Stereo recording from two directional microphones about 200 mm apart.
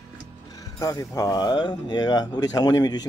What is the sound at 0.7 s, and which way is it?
Speech, 15° left (ahead or behind).